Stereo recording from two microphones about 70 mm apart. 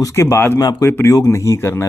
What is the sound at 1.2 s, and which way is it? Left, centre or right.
Speech, left.